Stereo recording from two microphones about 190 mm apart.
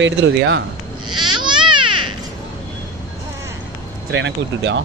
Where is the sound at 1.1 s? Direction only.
25° right (ahead or behind).